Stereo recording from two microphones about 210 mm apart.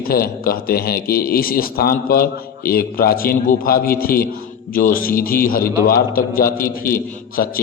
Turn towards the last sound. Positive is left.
turn(degrees=45)  # may be behind; listen again after turning